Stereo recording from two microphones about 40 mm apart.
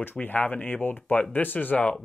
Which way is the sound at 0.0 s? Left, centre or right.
Left.